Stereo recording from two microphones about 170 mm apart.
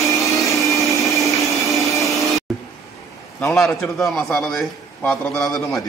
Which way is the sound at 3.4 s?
Centre (ahead or behind).